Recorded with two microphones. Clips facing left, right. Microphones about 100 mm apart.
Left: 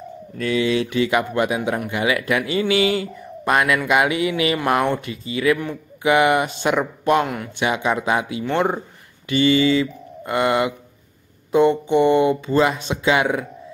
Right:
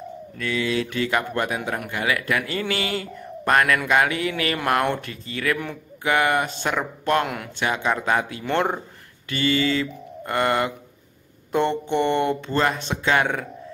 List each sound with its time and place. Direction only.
0.6 s speech: 20° left (ahead or behind)
7.2 s speech: centre (ahead or behind)
7.5 s speech: 15° left (ahead or behind)
9.3 s speech: 20° left (ahead or behind)